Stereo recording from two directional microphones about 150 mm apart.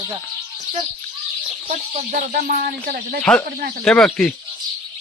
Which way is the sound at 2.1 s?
65° right (ahead or behind).